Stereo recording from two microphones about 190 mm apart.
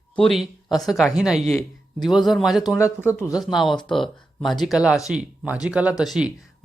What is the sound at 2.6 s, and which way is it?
Speech, 15° left (ahead or behind).